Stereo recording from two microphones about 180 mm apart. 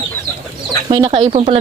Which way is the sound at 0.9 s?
25° right (ahead or behind).